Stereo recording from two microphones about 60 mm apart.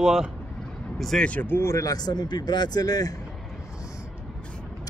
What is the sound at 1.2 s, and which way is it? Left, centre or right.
Speech, left.